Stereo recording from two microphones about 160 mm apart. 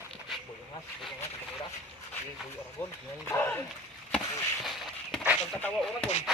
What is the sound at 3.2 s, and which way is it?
Speech, 10° left (ahead or behind).